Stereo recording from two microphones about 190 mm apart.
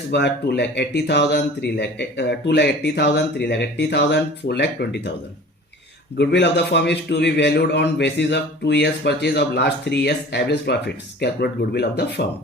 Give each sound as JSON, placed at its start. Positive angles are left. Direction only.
{"t": 0.1, "sound": "a man's voice", "side_deg": 65}
{"t": 6.1, "sound": "a man's voice", "side_deg": 65}